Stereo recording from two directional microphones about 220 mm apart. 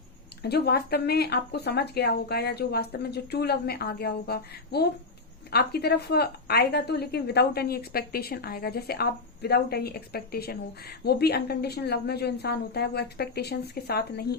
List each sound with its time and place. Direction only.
0.4 s a woman's voice: 45° left (ahead or behind)